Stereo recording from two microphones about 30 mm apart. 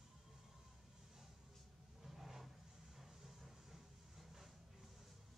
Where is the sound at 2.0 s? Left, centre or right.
Centre.